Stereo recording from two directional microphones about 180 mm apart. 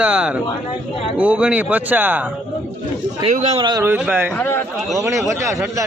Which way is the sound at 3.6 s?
20° right (ahead or behind).